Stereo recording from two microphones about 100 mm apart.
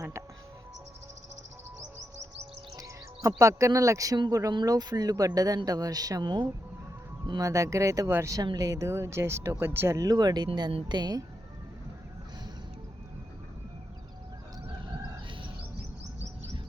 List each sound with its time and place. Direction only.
0.0 s music: 25° right (ahead or behind)
2.7 s speech: 35° right (ahead or behind)
7.3 s speech: 30° right (ahead or behind)